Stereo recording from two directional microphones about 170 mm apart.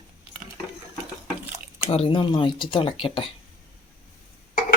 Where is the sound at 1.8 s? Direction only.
35° left (ahead or behind).